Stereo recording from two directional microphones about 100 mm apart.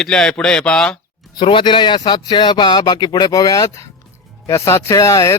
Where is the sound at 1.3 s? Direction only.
55° left (ahead or behind).